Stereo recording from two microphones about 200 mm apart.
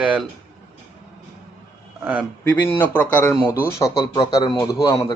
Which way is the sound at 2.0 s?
10° right (ahead or behind).